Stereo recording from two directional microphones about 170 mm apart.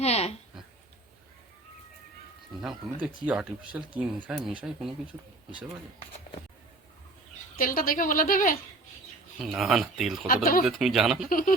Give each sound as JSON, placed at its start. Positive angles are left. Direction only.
{"t": 0.0, "sound": "speech", "side_deg": 40}
{"t": 2.6, "sound": "speech", "side_deg": -5}
{"t": 7.6, "sound": "speech", "side_deg": 55}
{"t": 9.4, "sound": "speech", "side_deg": 0}
{"t": 10.2, "sound": "speech", "side_deg": 55}
{"t": 10.6, "sound": "speech", "side_deg": 0}
{"t": 11.3, "sound": "speech", "side_deg": 55}